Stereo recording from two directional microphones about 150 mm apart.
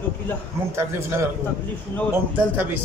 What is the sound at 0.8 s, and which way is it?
Speech, 15° right (ahead or behind).